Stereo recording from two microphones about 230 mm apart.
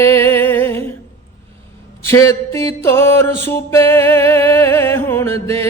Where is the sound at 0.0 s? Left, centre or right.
Centre.